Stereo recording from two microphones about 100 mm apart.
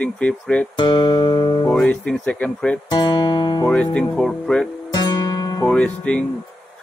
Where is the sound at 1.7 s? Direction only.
15° left (ahead or behind).